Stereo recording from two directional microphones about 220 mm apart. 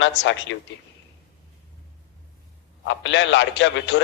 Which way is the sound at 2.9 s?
55° left (ahead or behind).